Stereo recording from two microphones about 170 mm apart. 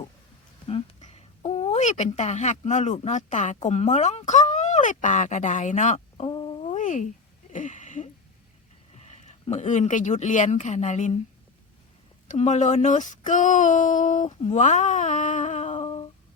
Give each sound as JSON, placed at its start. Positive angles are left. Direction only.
{"t": 0.7, "sound": "a woman's voice", "side_deg": 35}
{"t": 7.5, "sound": "a sound", "side_deg": 45}
{"t": 9.0, "sound": "speech", "side_deg": 40}
{"t": 12.3, "sound": "speech", "side_deg": 45}